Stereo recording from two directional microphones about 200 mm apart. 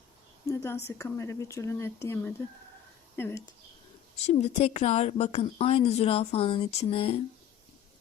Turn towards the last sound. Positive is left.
turn(degrees=30)  # may be behind; listen again after turning